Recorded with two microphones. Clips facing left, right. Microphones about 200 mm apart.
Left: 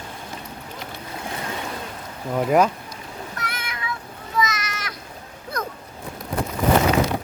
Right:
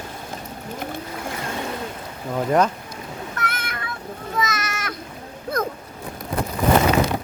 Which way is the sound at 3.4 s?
50° right (ahead or behind).